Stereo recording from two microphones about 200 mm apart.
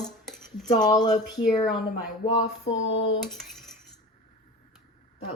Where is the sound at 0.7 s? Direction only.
20° left (ahead or behind).